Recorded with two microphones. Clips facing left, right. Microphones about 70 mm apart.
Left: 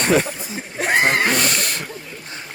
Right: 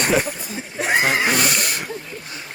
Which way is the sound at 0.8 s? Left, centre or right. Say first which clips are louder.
Left 1 dB; left.